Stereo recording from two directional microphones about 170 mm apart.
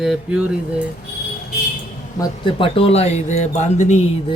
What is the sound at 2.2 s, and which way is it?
A woman's voice, 30° left (ahead or behind).